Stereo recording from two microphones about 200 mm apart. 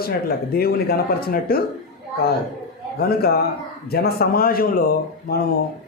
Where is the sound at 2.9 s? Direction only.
50° left (ahead or behind).